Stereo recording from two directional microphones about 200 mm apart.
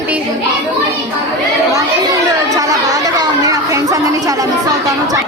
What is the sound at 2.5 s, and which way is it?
Chatter, 15° right (ahead or behind).